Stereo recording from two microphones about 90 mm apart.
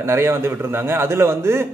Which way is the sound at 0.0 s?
30° right (ahead or behind).